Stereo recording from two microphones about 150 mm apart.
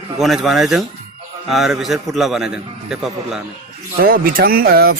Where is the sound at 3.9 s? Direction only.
80° right.